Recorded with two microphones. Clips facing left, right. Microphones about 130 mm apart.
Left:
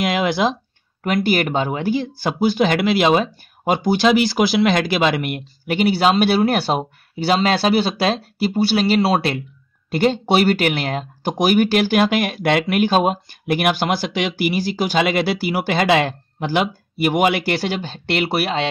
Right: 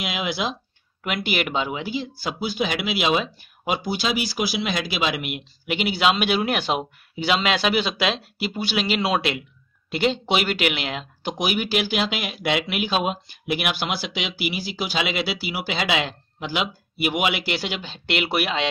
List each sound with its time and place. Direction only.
0.0 s speech: 55° left (ahead or behind)
1.0 s speech: 40° left (ahead or behind)